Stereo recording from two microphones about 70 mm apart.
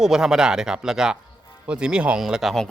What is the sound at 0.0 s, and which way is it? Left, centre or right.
Speech, centre.